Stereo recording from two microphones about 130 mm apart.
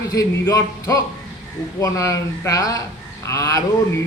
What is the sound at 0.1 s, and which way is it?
A man's voice, 25° left (ahead or behind).